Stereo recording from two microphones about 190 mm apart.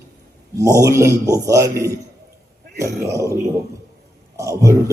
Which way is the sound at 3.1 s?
15° right (ahead or behind).